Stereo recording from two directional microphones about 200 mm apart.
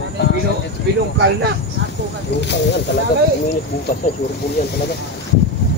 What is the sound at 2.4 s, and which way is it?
Speech, 60° left (ahead or behind).